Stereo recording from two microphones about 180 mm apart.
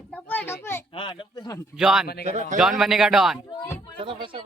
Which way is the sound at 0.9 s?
30° left (ahead or behind).